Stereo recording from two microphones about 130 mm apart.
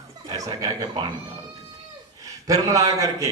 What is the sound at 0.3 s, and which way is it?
Speech, 25° right (ahead or behind).